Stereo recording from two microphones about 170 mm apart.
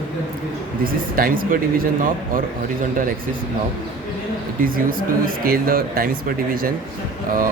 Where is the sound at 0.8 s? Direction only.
55° right (ahead or behind).